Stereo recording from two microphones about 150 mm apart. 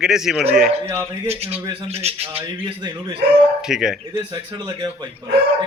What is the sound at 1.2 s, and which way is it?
Speech, 40° right (ahead or behind).